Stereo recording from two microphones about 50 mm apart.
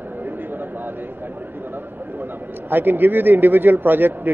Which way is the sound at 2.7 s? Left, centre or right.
Right.